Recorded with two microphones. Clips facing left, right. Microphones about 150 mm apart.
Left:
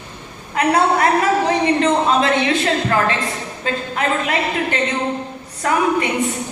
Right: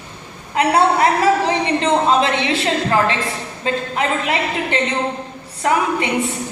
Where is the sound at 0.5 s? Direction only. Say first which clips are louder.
Right 1 dB; 25° right (ahead or behind).